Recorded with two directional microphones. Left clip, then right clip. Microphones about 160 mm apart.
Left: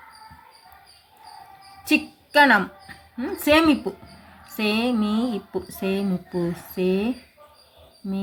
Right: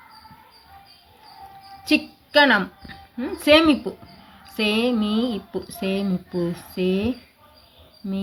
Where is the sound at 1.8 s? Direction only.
10° left (ahead or behind).